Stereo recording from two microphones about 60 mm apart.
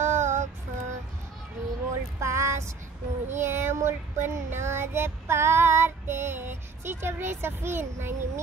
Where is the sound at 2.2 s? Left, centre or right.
Right.